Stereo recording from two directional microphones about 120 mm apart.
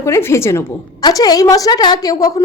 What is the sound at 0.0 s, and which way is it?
Speech, 20° left (ahead or behind).